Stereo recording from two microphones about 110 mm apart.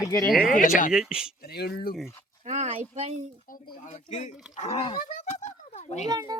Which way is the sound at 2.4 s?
90° right.